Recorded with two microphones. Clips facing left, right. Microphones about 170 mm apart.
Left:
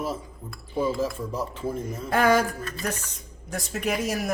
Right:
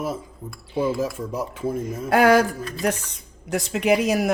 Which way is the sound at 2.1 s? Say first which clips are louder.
Right 5 dB; 70° right (ahead or behind).